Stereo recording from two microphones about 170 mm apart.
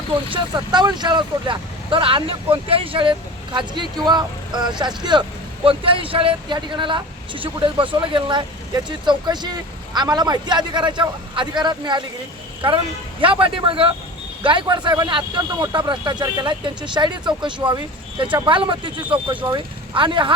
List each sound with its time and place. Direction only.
0.3 s speech: 25° right (ahead or behind)
13.2 s a man's voice: 30° right (ahead or behind)